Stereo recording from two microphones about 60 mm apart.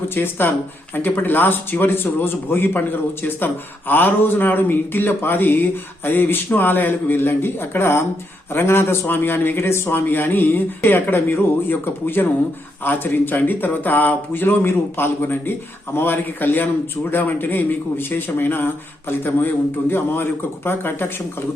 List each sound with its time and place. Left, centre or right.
0.2 s speech: left